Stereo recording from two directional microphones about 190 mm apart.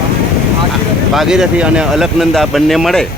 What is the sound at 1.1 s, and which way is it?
Speech, centre (ahead or behind).